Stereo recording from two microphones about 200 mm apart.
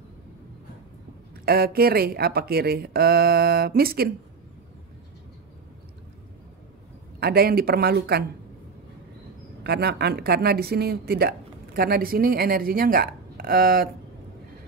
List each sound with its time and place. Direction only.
1.4 s a woman's voice: 50° right (ahead or behind)
7.2 s a woman's voice: 50° right (ahead or behind)
9.6 s a woman's voice: 55° right (ahead or behind)